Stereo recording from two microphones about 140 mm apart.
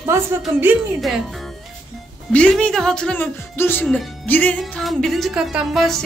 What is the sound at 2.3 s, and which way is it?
Speech, 5° left (ahead or behind).